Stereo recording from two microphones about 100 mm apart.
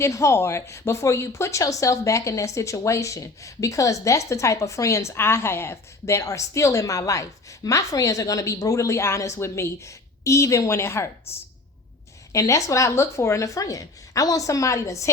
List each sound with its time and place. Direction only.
0.0 s a woman's voice: 30° left (ahead or behind)
12.3 s a woman's voice: 35° left (ahead or behind)